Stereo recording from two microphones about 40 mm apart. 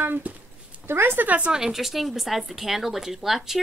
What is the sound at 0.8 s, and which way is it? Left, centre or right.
Speech, right.